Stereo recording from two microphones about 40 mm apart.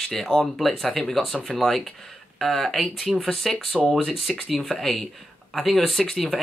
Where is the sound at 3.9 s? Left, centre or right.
Centre.